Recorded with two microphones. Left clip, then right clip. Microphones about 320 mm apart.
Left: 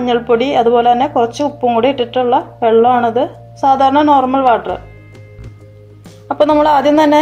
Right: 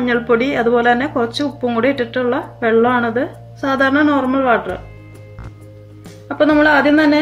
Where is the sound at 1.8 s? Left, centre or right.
Centre.